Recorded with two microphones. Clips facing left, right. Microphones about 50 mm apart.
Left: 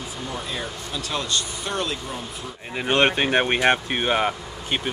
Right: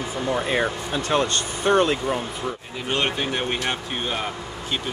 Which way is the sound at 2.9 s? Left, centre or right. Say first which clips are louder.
Left 5 dB; left.